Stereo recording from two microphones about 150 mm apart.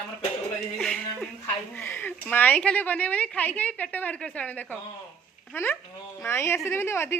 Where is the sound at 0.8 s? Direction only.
5° left (ahead or behind).